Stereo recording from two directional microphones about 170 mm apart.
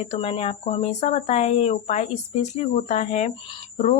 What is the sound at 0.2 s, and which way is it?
A woman's voice, 35° left (ahead or behind).